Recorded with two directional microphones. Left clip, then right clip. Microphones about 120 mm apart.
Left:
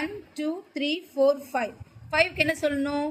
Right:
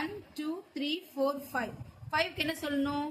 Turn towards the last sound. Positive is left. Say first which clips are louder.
# left 7 dB
turn(degrees=35)  # may be behind; listen again after turning